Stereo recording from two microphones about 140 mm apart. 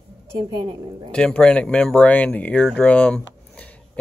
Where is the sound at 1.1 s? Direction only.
5° left (ahead or behind).